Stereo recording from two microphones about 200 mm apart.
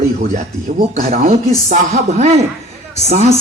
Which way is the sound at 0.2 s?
35° right (ahead or behind).